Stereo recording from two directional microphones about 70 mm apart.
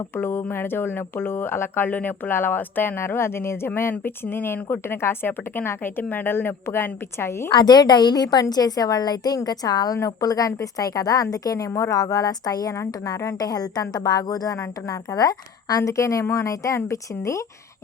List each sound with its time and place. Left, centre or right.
0.2 s speech: left
7.5 s a woman's voice: left
12.7 s speech: left
13.4 s a woman's voice: left